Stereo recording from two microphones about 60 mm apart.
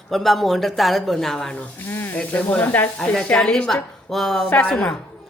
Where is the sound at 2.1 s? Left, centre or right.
Left.